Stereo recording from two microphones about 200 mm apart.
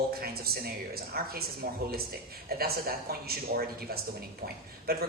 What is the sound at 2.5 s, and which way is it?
A woman's voice, 50° right (ahead or behind).